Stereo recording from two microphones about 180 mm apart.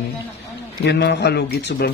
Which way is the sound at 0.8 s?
70° left (ahead or behind).